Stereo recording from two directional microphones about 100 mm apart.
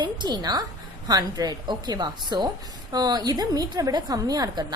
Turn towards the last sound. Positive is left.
turn(degrees=-40)  # may be behind; listen again after turning